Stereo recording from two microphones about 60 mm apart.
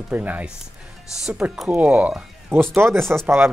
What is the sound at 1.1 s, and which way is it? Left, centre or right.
Speech, centre.